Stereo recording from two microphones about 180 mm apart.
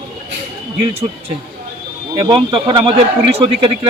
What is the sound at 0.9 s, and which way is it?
A man's voice, 35° right (ahead or behind).